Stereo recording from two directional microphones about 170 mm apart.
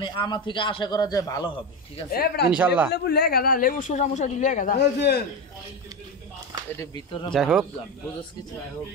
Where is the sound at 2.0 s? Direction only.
65° left (ahead or behind).